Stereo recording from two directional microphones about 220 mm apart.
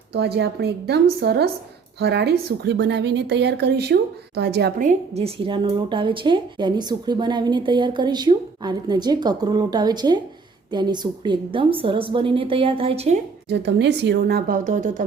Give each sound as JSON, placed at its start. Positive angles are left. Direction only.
{"t": 0.1, "sound": "a woman's voice", "side_deg": -50}
{"t": 4.9, "sound": "a woman's voice", "side_deg": -30}
{"t": 13.5, "sound": "a woman's voice", "side_deg": -50}